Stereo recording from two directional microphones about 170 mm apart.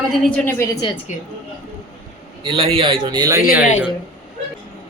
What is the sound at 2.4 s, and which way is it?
A man's voice, 30° right (ahead or behind).